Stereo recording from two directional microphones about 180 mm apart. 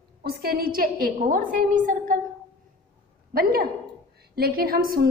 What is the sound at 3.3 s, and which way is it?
A woman's voice, 55° right (ahead or behind).